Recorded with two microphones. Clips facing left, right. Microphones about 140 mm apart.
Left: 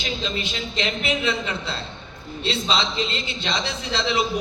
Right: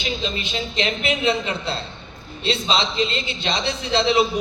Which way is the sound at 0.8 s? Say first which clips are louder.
Right 2 dB; 20° right (ahead or behind).